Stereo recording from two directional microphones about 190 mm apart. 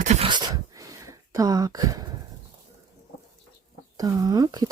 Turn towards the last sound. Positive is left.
turn(degrees=-20)  # may be behind; listen again after turning